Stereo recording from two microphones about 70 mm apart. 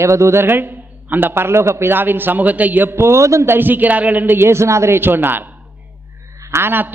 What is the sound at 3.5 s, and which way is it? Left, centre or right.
A man's voice, right.